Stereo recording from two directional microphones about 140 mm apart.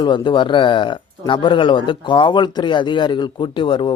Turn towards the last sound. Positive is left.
turn(degrees=35)  # may be behind; listen again after turning